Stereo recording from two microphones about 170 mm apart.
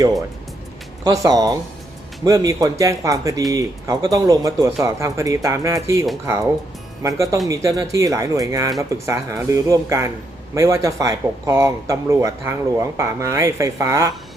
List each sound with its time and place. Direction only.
1.0 s speech: 20° right (ahead or behind)